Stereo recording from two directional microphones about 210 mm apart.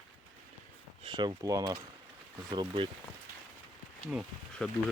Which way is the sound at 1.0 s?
20° right (ahead or behind).